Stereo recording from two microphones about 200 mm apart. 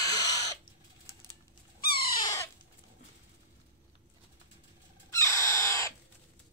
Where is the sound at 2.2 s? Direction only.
15° left (ahead or behind).